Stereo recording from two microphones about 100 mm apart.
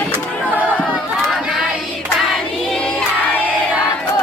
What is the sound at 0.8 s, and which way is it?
Crowd, centre (ahead or behind).